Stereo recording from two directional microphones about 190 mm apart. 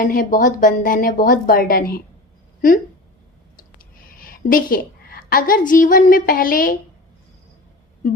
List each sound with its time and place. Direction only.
0.0 s a woman's voice: 50° left (ahead or behind)
4.2 s a woman's voice: 50° left (ahead or behind)